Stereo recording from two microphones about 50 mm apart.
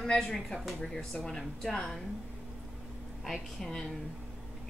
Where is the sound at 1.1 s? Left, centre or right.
Centre.